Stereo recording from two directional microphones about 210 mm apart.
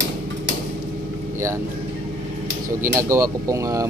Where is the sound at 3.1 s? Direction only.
15° right (ahead or behind).